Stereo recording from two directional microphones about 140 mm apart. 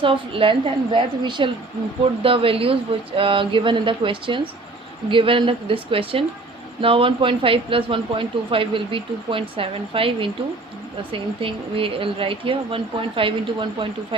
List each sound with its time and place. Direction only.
0.0 s speech: 40° right (ahead or behind)